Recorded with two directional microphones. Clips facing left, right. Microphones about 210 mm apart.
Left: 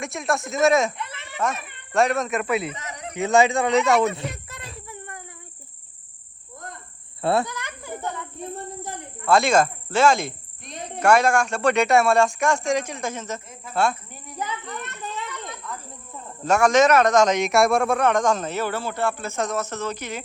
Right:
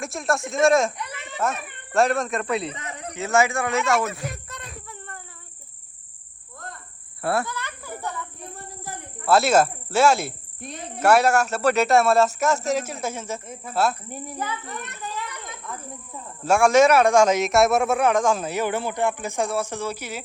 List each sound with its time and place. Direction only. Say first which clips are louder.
0.0 s speech: even; centre (ahead or behind)
3.2 s speech: left 3 dB; 20° left (ahead or behind)
4.3 s a sound: even; centre (ahead or behind)
4.9 s cricket: left 2 dB; 15° left (ahead or behind)
7.2 s a sound: left 3 dB; 20° left (ahead or behind)
9.2 s speech: even; 5° right (ahead or behind)
15.0 s children playing: left 1 dB; 25° left (ahead or behind)
16.4 s a man's voice: right 1 dB; 10° right (ahead or behind)